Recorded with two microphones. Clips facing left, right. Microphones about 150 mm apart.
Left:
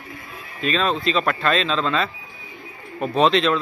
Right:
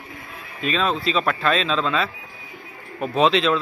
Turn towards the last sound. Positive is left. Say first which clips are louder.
# left 1 dB
turn(degrees=0)  # may be behind; listen again after turning